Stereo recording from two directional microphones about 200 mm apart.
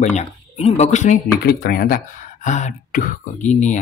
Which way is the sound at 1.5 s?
50° left (ahead or behind).